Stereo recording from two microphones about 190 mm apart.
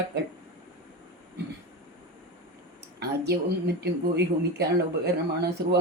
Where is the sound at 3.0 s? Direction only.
60° right (ahead or behind).